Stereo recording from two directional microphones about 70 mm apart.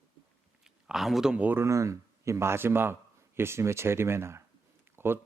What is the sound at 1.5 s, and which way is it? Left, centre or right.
Speech, right.